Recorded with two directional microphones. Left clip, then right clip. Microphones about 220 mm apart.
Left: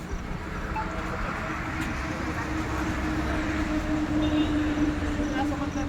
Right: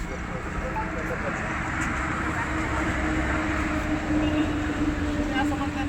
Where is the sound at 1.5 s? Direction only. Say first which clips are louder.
Right 3 dB; 30° right (ahead or behind).